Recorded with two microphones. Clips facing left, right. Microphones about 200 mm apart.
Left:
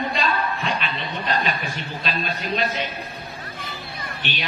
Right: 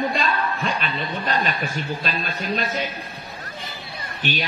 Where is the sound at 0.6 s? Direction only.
45° right (ahead or behind).